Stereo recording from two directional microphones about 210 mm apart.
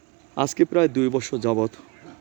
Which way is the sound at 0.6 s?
15° left (ahead or behind).